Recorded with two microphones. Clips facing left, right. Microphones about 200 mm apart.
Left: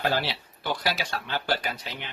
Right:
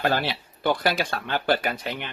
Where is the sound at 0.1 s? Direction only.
55° right (ahead or behind).